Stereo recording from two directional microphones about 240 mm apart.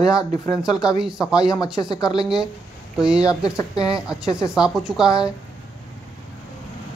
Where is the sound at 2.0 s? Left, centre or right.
Centre.